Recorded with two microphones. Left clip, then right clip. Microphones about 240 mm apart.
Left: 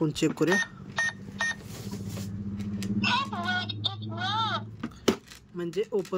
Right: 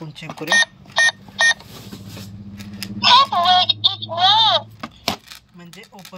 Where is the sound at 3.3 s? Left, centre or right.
Centre.